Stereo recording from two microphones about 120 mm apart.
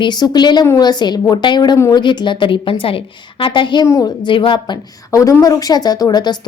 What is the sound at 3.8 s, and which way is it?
Speech, 25° left (ahead or behind).